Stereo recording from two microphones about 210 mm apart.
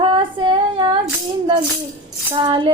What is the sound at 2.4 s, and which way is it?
Music, 25° right (ahead or behind).